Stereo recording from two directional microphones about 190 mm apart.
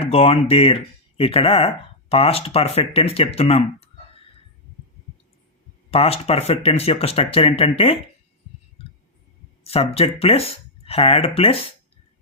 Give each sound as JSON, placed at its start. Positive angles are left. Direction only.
{"t": 0.0, "sound": "speech", "side_deg": 30}
{"t": 5.9, "sound": "speech", "side_deg": 30}
{"t": 9.6, "sound": "speech", "side_deg": 30}